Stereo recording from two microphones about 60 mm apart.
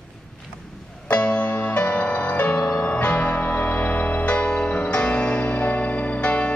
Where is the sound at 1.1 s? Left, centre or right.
Centre.